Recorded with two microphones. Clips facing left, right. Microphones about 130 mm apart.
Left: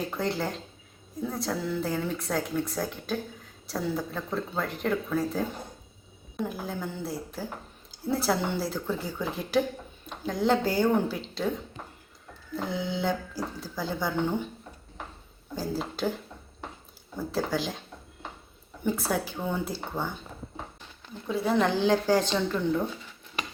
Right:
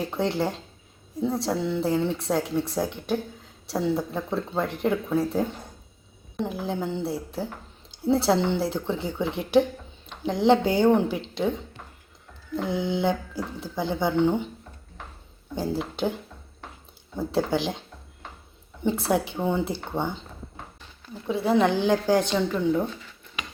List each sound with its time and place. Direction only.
0.1 s speech: 25° right (ahead or behind)
6.4 s speech: 25° right (ahead or behind)
12.6 s speech: 20° right (ahead or behind)
15.5 s speech: 20° right (ahead or behind)
17.2 s speech: 25° right (ahead or behind)
21.2 s a woman's voice: 20° right (ahead or behind)